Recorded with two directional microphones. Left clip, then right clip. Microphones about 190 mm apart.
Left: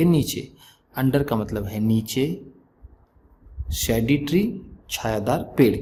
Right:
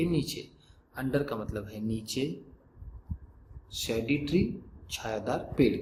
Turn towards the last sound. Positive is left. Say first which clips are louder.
# left 8 dB
turn(degrees=40)  # may be behind; listen again after turning